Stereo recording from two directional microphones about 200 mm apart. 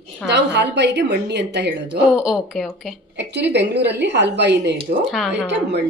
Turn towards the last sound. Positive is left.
turn(degrees=0)  # may be behind; listen again after turning